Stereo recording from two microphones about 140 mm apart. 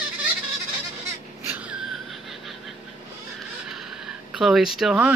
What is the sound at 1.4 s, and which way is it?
Wail, 15° right (ahead or behind).